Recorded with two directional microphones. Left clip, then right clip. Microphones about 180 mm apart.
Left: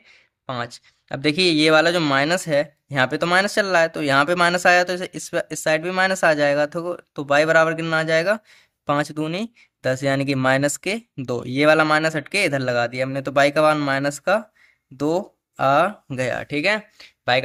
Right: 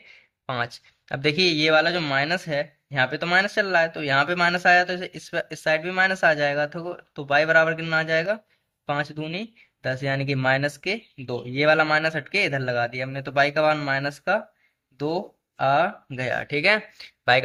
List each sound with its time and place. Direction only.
0.1 s speech: 20° left (ahead or behind)